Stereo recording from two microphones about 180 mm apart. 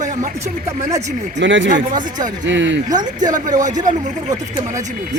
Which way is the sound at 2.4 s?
90° right.